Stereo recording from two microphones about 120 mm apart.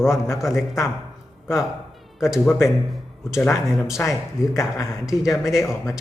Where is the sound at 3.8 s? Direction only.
25° left (ahead or behind).